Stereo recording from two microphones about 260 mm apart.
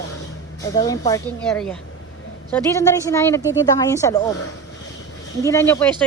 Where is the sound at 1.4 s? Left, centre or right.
Centre.